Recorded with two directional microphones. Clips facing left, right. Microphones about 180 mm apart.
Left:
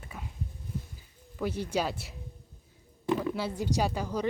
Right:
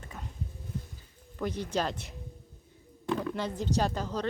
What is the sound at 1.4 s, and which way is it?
Speech, 10° left (ahead or behind).